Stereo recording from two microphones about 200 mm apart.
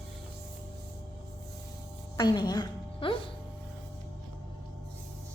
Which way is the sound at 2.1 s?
20° left (ahead or behind).